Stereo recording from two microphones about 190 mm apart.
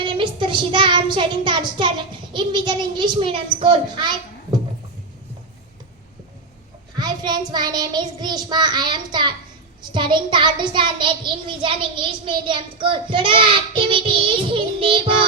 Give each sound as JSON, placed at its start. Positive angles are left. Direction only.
{"t": 0.0, "sound": "child singing", "side_deg": -25}
{"t": 2.3, "sound": "a child's voice", "side_deg": -25}
{"t": 6.9, "sound": "a child's voice", "side_deg": -20}